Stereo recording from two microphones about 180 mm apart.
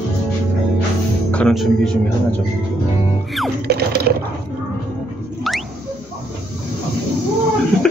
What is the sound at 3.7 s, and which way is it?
Water, 65° right (ahead or behind).